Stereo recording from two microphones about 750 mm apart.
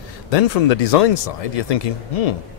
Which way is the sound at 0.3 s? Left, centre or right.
Left.